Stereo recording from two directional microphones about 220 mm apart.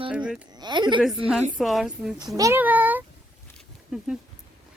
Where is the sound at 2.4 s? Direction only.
10° right (ahead or behind).